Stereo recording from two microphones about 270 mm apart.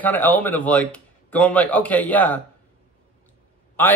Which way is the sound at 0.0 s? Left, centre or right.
Centre.